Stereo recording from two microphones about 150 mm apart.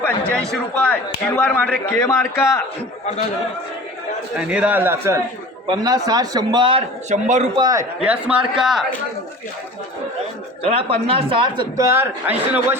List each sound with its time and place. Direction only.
0.0 s a man's voice: 5° left (ahead or behind)
4.4 s a man's voice: 10° right (ahead or behind)
5.6 s a man's voice: 25° right (ahead or behind)
7.1 s a man's voice: 50° right (ahead or behind)
7.5 s a man's voice: 25° right (ahead or behind)
8.0 s a man's voice: 10° right (ahead or behind)
10.7 s speech: 45° right (ahead or behind)
11.8 s a man's voice: 15° right (ahead or behind)